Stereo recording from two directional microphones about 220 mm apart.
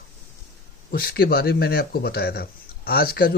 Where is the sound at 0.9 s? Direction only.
45° left (ahead or behind).